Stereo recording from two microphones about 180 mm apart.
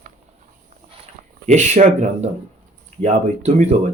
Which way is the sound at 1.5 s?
40° right (ahead or behind).